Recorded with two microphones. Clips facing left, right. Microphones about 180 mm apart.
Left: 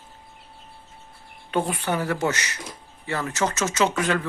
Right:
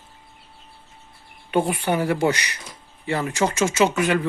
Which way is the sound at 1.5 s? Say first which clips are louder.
Right 3 dB; 10° right (ahead or behind).